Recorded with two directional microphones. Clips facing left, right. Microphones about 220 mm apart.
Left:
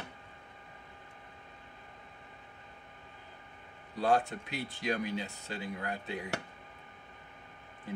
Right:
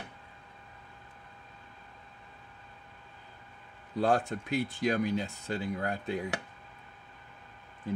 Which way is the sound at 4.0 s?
45° right (ahead or behind).